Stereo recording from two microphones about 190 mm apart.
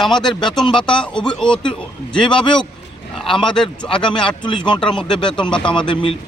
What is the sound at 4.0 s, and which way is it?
Speech, 25° left (ahead or behind).